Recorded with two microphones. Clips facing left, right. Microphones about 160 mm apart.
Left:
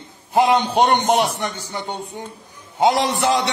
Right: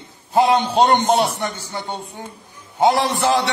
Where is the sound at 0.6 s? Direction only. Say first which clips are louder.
Right 1 dB; 15° left (ahead or behind).